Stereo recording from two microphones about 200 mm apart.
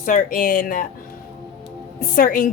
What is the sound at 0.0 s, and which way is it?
Speech, 40° left (ahead or behind).